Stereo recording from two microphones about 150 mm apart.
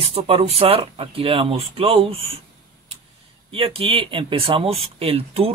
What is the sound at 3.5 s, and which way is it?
Speech, 40° right (ahead or behind).